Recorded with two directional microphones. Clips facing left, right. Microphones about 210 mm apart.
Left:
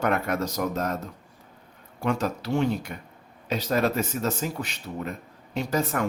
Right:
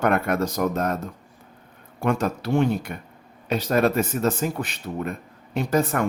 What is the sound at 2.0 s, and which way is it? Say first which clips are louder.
Speech: right 3 dB; 55° right (ahead or behind).